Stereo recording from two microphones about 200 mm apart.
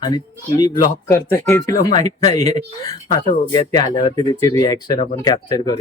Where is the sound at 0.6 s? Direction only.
15° left (ahead or behind).